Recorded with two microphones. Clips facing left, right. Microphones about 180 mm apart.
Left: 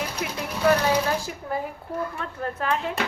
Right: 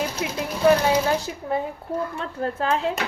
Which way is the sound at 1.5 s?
25° right (ahead or behind).